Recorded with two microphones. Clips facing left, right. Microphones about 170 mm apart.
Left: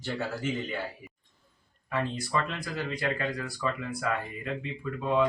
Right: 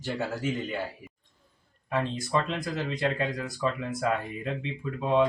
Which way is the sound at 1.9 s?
20° right (ahead or behind).